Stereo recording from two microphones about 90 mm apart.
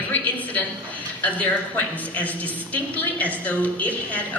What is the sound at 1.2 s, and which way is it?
A woman's voice, 20° left (ahead or behind).